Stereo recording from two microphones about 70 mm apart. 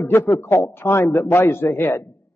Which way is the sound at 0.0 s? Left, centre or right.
Left.